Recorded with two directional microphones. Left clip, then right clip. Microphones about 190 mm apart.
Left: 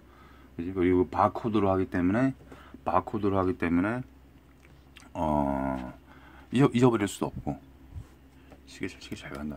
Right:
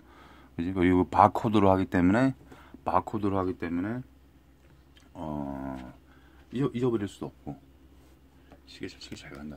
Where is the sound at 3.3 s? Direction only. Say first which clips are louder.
Left 4 dB; 5° left (ahead or behind).